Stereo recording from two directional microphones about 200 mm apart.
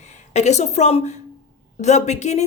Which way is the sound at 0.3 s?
35° left (ahead or behind).